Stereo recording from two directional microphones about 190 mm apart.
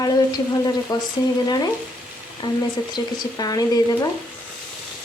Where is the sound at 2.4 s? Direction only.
20° left (ahead or behind).